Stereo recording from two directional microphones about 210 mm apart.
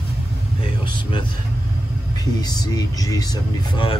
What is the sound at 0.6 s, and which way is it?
Speech, 25° left (ahead or behind).